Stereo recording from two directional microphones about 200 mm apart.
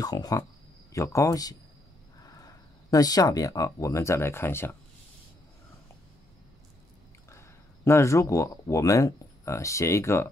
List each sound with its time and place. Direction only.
0.0 s speech: 20° left (ahead or behind)
7.2 s speech: 15° left (ahead or behind)